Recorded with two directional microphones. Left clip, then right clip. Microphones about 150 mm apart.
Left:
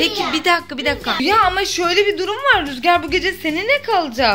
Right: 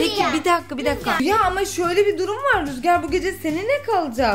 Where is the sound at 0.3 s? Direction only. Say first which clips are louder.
Left 3 dB; 15° right (ahead or behind).